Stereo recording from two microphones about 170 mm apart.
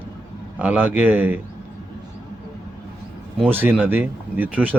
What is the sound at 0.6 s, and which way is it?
Speech, 10° right (ahead or behind).